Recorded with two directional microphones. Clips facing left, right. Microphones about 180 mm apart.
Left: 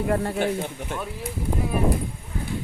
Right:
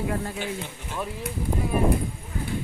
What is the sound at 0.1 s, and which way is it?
Speech, 55° left (ahead or behind).